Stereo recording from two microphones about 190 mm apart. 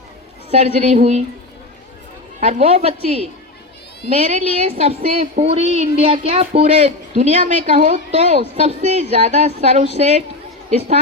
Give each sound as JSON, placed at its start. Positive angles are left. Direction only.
{"t": 0.5, "sound": "a woman's voice", "side_deg": -35}
{"t": 2.4, "sound": "a woman's voice", "side_deg": -35}